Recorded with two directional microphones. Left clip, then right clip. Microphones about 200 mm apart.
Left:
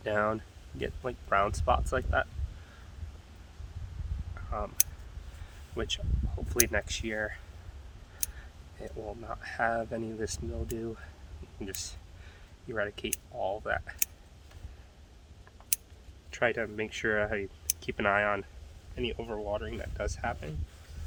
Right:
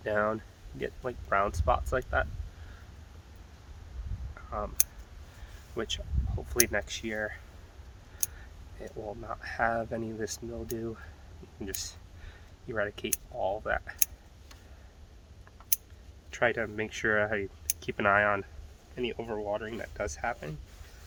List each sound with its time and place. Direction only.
0.0 s speech: 5° left (ahead or behind)
5.7 s speech: centre (ahead or behind)
8.8 s speech: centre (ahead or behind)
16.3 s speech: 5° right (ahead or behind)